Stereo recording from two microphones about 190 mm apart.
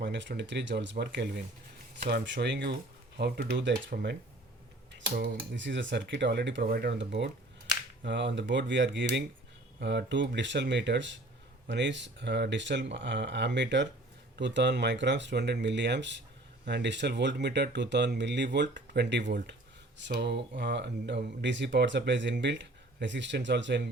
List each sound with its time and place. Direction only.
0.0 s speech: 70° right (ahead or behind)
5.5 s speech: 70° right (ahead or behind)